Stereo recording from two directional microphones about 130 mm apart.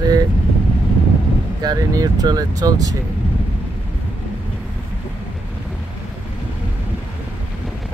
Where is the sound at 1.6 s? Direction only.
30° right (ahead or behind).